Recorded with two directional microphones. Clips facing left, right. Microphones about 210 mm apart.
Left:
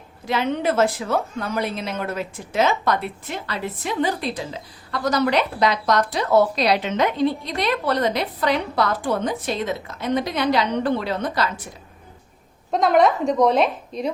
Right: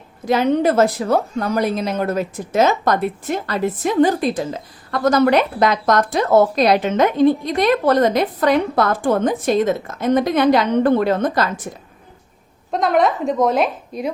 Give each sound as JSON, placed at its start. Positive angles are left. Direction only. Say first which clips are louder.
{"t": 0.3, "sound": "speech", "louder": "right 6 dB", "side_deg": -40}
{"t": 12.7, "sound": "a woman's voice", "louder": "even", "side_deg": 0}